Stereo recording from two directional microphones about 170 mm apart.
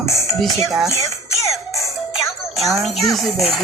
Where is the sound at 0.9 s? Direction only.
15° left (ahead or behind).